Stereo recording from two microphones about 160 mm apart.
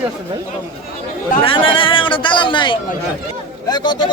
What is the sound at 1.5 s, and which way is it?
Speech, 35° left (ahead or behind).